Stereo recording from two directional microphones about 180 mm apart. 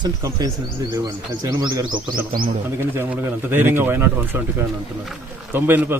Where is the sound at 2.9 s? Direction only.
10° right (ahead or behind).